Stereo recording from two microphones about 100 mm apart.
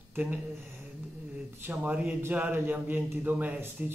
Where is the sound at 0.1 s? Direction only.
15° right (ahead or behind).